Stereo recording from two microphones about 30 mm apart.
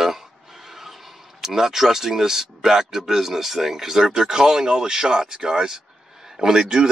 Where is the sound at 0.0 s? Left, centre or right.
Centre.